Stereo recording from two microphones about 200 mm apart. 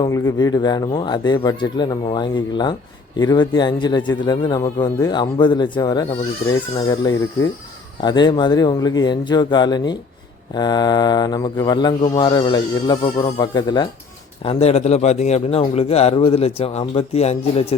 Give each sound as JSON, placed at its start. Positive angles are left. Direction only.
{"t": 0.0, "sound": "speech", "side_deg": 15}
{"t": 14.4, "sound": "speech", "side_deg": 30}